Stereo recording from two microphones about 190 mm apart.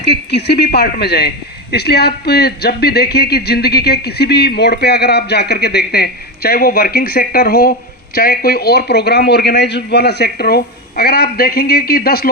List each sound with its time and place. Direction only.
0.3 s speech: 60° left (ahead or behind)